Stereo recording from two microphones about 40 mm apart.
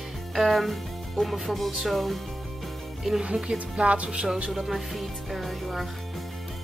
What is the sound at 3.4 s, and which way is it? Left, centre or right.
Speech, right.